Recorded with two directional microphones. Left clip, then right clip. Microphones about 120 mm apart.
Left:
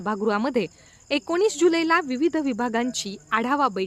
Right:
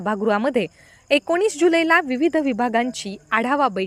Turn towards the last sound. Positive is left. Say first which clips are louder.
# right 3 dB
turn(degrees=-25)  # may be behind; listen again after turning